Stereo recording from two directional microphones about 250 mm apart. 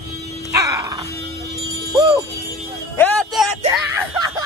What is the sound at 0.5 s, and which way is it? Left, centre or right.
Music, centre.